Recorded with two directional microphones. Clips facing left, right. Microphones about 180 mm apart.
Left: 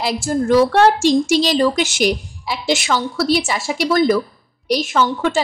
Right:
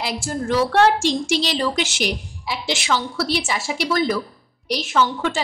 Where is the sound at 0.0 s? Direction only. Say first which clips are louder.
Left 6 dB; 45° left (ahead or behind).